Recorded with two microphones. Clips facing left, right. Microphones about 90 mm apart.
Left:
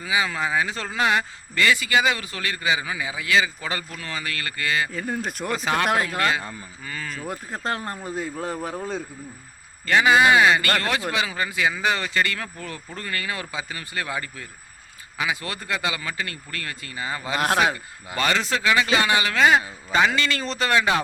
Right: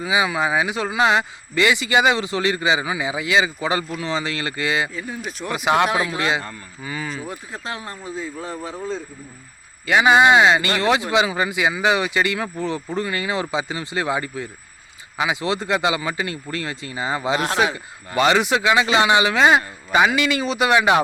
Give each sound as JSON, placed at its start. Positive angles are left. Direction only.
{"t": 0.0, "sound": "speech", "side_deg": -20}
{"t": 4.9, "sound": "speech", "side_deg": 55}
{"t": 5.5, "sound": "speech", "side_deg": -15}
{"t": 7.3, "sound": "speech", "side_deg": 45}
{"t": 8.1, "sound": "speech", "side_deg": 60}
{"t": 9.8, "sound": "speech", "side_deg": -15}